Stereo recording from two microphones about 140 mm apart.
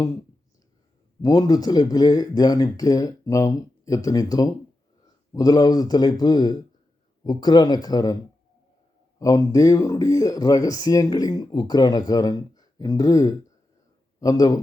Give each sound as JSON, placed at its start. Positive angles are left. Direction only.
{"t": 1.2, "sound": "a man's voice", "side_deg": 30}